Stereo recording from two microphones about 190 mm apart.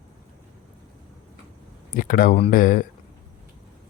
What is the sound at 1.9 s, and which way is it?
Speech, 45° left (ahead or behind).